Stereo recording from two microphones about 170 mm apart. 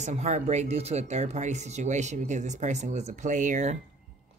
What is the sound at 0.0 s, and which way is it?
Speech, 45° right (ahead or behind).